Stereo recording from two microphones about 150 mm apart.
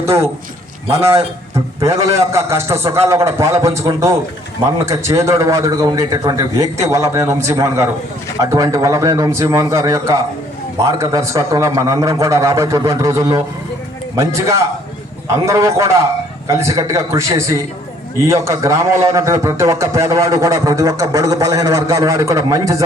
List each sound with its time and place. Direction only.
1.5 s a man's voice: 20° right (ahead or behind)